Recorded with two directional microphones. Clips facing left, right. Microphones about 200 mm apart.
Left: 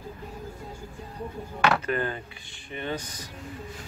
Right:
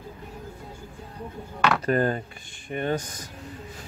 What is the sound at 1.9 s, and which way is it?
A man's voice, 40° right (ahead or behind).